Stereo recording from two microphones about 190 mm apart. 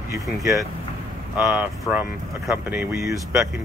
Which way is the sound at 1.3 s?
5° right (ahead or behind).